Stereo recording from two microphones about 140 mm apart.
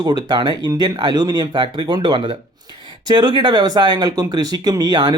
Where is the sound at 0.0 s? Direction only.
30° right (ahead or behind).